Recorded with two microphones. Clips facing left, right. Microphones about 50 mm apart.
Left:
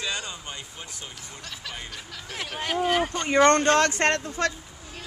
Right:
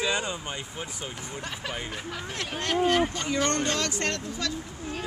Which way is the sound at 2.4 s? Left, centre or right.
Centre.